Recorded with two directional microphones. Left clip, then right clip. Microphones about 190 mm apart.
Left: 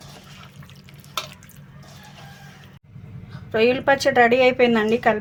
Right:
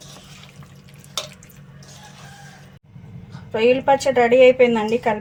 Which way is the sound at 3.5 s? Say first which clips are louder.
Right 2 dB; 55° left (ahead or behind).